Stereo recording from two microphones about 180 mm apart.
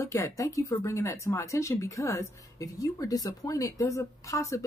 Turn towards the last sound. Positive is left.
turn(degrees=15)  # may be behind; listen again after turning